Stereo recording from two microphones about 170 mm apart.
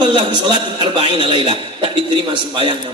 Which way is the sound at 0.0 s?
30° right (ahead or behind).